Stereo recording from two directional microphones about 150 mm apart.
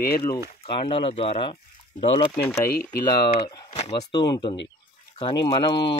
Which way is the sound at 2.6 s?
90° left.